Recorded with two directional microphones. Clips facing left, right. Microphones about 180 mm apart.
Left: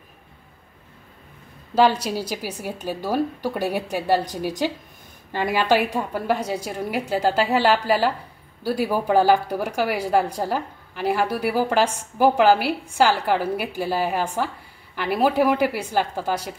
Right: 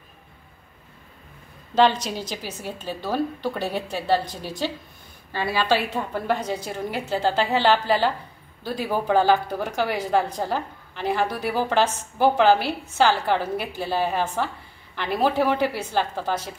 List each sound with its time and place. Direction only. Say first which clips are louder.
1.8 s speech: left 1 dB; 10° left (ahead or behind)